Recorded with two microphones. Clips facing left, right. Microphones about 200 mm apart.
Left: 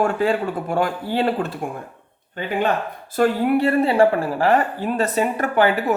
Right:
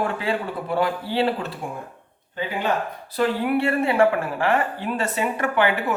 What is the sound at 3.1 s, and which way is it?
Speech, 45° left (ahead or behind).